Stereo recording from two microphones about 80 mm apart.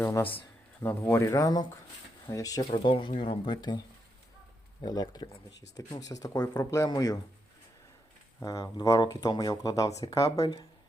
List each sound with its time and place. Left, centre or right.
0.0 s speech: left
1.2 s speech: left
2.7 s speech: left
4.8 s speech: left
8.4 s speech: left